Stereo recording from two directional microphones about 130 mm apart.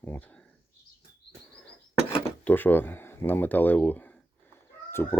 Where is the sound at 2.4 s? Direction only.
15° left (ahead or behind).